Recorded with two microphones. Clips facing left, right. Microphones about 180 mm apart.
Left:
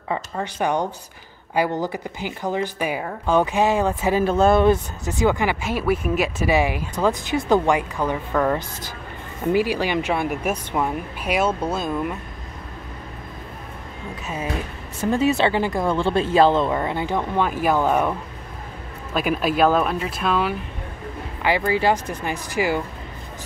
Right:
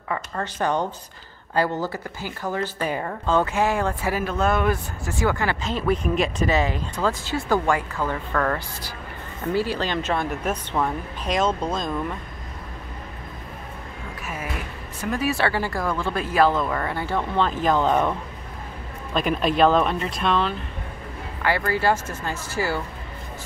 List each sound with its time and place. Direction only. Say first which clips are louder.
0.1 s speech: left 2 dB; 15° left (ahead or behind)
14.2 s speech: left 5 dB; 20° left (ahead or behind)
19.1 s speech: even; 5° left (ahead or behind)